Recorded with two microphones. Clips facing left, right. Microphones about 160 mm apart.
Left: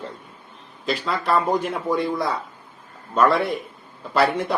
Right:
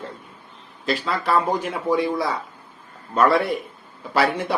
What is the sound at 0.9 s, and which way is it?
Speech, centre (ahead or behind).